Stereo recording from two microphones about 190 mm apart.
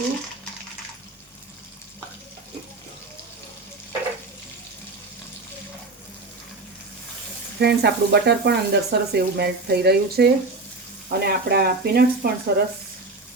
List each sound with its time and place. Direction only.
7.6 s speech: 60° right (ahead or behind)